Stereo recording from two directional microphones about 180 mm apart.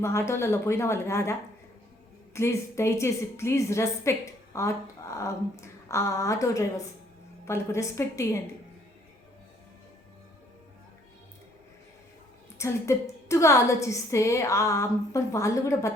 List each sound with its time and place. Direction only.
0.0 s a woman's voice: 15° left (ahead or behind)
12.5 s a woman's voice: 15° left (ahead or behind)